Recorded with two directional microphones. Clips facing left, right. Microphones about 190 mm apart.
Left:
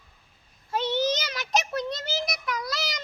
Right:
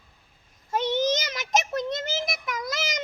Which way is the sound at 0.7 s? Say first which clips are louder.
Right 2 dB; 20° right (ahead or behind).